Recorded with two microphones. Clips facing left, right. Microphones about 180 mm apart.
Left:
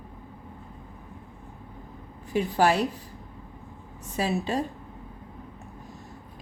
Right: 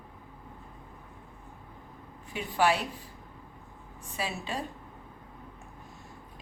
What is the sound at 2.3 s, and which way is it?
Speech, 40° left (ahead or behind).